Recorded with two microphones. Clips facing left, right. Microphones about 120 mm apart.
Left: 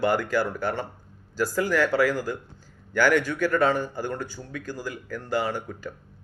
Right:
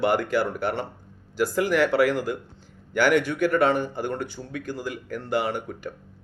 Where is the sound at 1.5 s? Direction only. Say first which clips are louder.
Right 2 dB; 20° right (ahead or behind).